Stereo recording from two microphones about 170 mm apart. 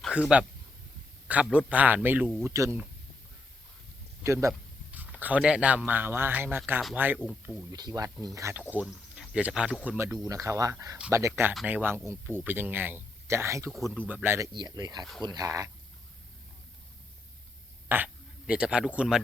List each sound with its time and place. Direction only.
0.0 s speech: 5° right (ahead or behind)
4.2 s a sound: 15° right (ahead or behind)
5.2 s speech: 5° right (ahead or behind)
7.7 s speech: 25° right (ahead or behind)
8.7 s speech: 5° right (ahead or behind)
13.7 s speech: centre (ahead or behind)
14.1 s speech: 10° right (ahead or behind)
17.8 s speech: 10° right (ahead or behind)